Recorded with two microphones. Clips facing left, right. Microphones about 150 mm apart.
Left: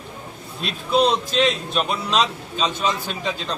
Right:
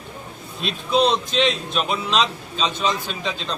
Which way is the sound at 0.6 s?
5° left (ahead or behind).